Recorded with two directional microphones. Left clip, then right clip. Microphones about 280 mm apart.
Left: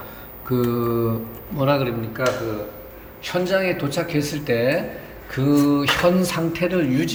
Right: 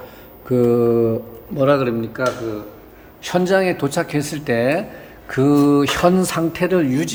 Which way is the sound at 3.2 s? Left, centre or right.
Right.